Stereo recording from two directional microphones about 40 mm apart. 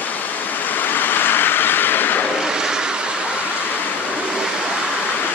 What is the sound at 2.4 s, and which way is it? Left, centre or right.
Vehicle, centre.